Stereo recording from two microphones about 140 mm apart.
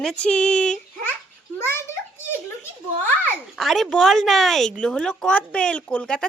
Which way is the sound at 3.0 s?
15° left (ahead or behind).